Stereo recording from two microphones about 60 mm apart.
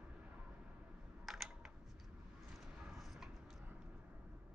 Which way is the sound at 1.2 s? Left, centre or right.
Centre.